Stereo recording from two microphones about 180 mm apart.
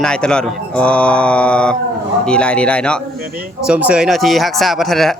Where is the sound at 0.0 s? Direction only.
5° left (ahead or behind).